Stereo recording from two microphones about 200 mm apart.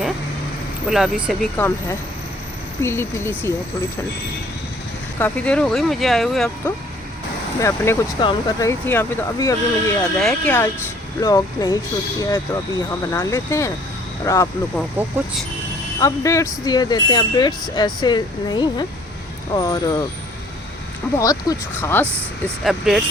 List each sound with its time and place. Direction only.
0.9 s speech: centre (ahead or behind)
5.2 s speech: 5° left (ahead or behind)
7.6 s speech: 10° left (ahead or behind)
11.2 s speech: 20° left (ahead or behind)
14.9 s speech: 5° right (ahead or behind)
16.0 s speech: 15° left (ahead or behind)
21.2 s speech: 15° left (ahead or behind)
22.0 s speech: 10° right (ahead or behind)